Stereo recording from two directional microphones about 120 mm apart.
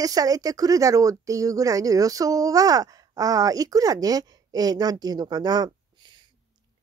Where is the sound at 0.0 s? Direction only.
30° right (ahead or behind).